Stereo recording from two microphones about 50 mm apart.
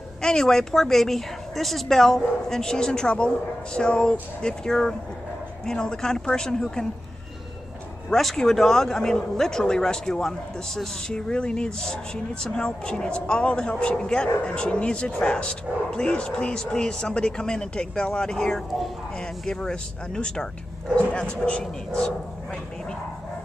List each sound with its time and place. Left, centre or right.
0.2 s a woman's voice: centre
8.1 s a woman's voice: centre